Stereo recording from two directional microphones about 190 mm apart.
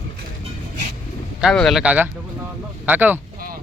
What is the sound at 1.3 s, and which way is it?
Speech, centre (ahead or behind).